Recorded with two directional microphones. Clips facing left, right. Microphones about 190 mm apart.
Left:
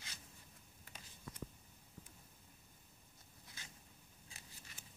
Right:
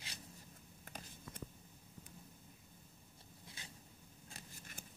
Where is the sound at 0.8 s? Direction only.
55° right (ahead or behind).